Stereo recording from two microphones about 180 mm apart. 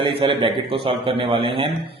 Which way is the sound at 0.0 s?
30° right (ahead or behind).